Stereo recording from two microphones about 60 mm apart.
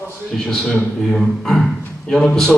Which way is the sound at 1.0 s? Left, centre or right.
Centre.